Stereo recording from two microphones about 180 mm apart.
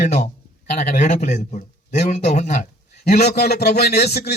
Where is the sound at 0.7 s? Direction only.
40° left (ahead or behind).